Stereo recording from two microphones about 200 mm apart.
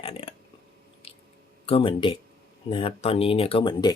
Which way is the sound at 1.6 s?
25° left (ahead or behind).